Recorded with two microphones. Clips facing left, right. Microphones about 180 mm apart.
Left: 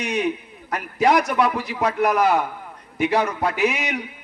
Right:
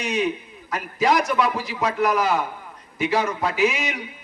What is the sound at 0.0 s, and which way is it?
A man's voice, 60° left (ahead or behind).